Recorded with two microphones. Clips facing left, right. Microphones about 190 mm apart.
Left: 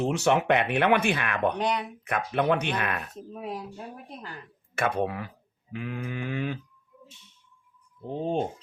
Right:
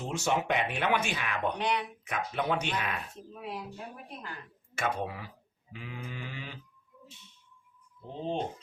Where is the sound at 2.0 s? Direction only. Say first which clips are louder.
Left 6 dB; 60° left (ahead or behind).